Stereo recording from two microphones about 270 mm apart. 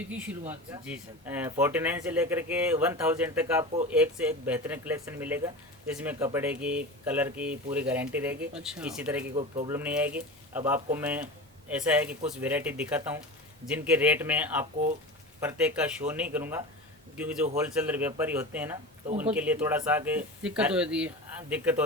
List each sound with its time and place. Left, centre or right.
0.1 s speech: centre
9.3 s speech: right
9.6 s speech: centre